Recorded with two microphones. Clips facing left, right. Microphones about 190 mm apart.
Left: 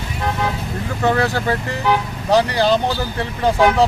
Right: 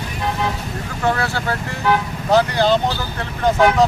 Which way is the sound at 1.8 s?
15° left (ahead or behind).